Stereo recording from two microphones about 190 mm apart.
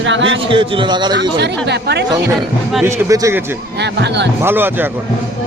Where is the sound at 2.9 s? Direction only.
15° right (ahead or behind).